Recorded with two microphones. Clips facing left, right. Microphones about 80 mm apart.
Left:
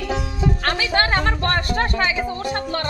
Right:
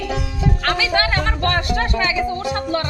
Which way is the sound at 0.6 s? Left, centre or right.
Left.